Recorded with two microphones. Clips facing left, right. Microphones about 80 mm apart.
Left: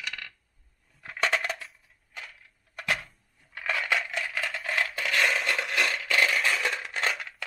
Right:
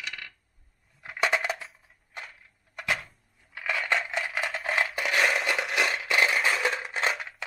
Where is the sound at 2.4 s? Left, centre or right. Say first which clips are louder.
Right 1 dB; centre.